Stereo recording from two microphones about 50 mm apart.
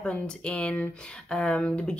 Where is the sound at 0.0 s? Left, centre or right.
Centre.